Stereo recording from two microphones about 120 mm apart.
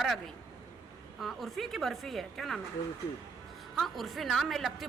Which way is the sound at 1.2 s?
Centre (ahead or behind).